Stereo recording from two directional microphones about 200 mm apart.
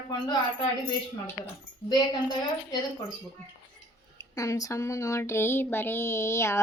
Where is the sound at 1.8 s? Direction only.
20° left (ahead or behind).